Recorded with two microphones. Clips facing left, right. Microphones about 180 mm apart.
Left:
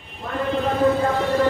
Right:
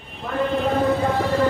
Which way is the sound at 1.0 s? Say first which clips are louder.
Left 1 dB; centre (ahead or behind).